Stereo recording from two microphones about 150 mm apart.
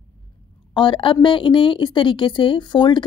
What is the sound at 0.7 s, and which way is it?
A woman's voice, 35° left (ahead or behind).